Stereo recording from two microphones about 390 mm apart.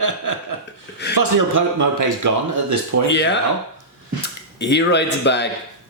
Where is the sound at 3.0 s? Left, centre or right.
Left.